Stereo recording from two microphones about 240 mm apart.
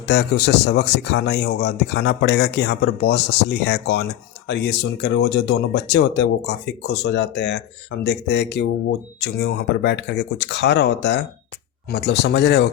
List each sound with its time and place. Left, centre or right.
0.0 s speech: left